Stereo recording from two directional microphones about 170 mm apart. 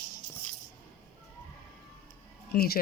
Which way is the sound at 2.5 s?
65° left (ahead or behind).